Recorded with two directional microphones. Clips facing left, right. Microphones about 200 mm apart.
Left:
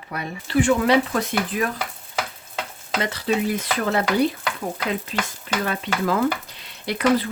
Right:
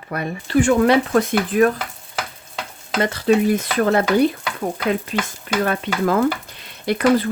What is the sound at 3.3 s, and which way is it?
Speech, 50° right (ahead or behind).